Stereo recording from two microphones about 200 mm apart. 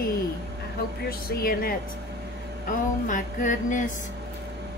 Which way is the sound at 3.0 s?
40° left (ahead or behind).